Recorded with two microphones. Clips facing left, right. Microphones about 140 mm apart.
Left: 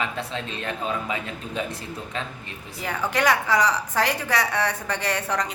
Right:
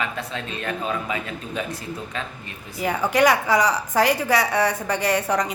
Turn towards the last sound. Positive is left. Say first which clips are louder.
# right 4 dB
turn(degrees=-10)  # may be behind; listen again after turning